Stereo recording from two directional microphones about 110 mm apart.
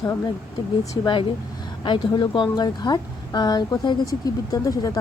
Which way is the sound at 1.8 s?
45° left (ahead or behind).